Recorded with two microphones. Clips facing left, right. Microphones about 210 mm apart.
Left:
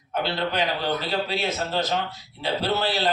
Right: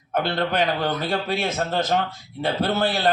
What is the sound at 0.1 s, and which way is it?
A man's voice, 50° right (ahead or behind).